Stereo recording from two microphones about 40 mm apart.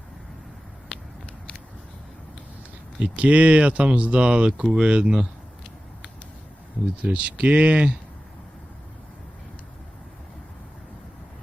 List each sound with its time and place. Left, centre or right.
3.0 s speech: right
7.0 s speech: right